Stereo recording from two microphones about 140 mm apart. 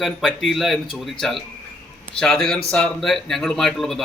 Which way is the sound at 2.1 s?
5° left (ahead or behind).